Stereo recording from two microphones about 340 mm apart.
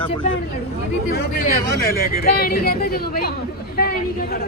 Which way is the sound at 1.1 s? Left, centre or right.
Left.